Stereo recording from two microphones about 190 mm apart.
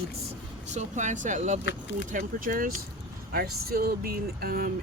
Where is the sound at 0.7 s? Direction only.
40° right (ahead or behind).